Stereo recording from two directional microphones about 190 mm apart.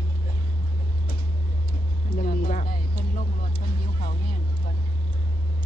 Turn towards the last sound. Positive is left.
turn(degrees=45)  # may be behind; listen again after turning